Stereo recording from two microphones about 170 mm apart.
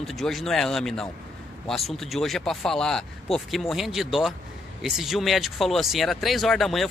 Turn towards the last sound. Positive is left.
turn(degrees=0)  # may be behind; listen again after turning